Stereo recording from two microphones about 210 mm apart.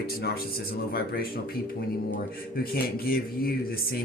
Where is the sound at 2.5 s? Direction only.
45° left (ahead or behind).